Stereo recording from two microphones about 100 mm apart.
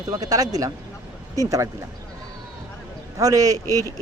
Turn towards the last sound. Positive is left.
turn(degrees=-35)  # may be behind; listen again after turning